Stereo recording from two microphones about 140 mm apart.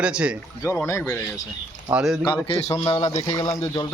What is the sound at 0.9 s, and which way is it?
Speech, 20° left (ahead or behind).